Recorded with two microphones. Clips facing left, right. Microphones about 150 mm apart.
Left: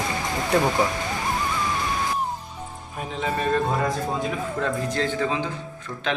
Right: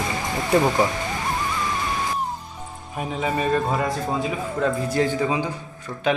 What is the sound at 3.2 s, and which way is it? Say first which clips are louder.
A man's voice: right 1 dB; 5° right (ahead or behind).